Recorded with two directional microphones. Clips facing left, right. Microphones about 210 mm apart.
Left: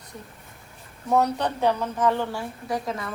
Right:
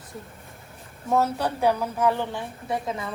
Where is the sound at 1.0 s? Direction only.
Centre (ahead or behind).